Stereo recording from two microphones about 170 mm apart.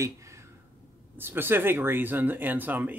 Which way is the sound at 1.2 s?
10° right (ahead or behind).